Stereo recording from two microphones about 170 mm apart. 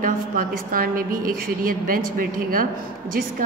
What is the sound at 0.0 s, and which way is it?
A woman's voice, 55° right (ahead or behind).